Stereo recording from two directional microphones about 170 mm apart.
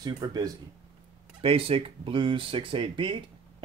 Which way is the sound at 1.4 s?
35° right (ahead or behind).